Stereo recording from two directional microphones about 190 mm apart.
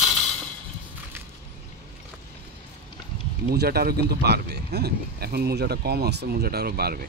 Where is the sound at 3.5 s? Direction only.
55° right (ahead or behind).